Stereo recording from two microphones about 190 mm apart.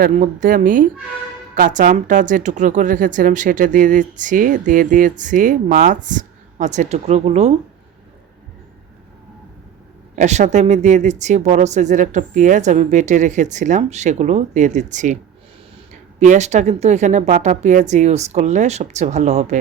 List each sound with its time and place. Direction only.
0.0 s speech: 45° right (ahead or behind)
10.2 s a woman's voice: 40° right (ahead or behind)
16.2 s a woman's voice: 40° right (ahead or behind)